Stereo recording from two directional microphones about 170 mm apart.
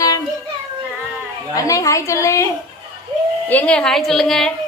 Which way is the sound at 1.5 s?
20° left (ahead or behind).